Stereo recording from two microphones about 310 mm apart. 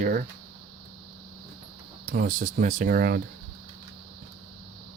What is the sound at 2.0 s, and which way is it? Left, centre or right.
Speech, right.